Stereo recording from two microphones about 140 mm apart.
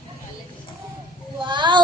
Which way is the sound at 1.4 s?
35° right (ahead or behind).